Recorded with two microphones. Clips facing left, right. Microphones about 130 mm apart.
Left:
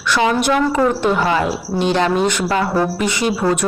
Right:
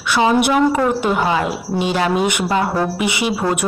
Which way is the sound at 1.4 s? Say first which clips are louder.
Left 1 dB; centre (ahead or behind).